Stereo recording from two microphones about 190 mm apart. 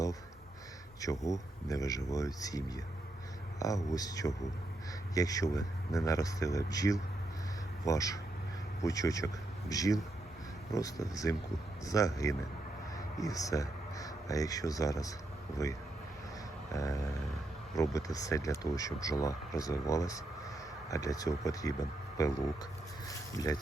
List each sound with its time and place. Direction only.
1.0 s speech: 15° left (ahead or behind)
16.7 s speech: 15° left (ahead or behind)
23.4 s speech: 20° left (ahead or behind)